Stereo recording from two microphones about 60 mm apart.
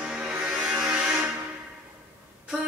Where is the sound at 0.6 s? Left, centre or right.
Centre.